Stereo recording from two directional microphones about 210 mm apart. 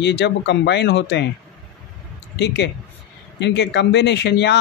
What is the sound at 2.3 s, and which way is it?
Speech, 55° left (ahead or behind).